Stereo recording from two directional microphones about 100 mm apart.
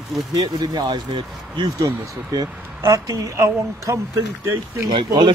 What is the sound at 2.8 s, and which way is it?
A woman's voice, 35° right (ahead or behind).